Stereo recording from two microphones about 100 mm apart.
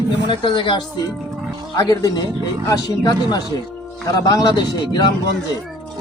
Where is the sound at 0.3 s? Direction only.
60° left (ahead or behind).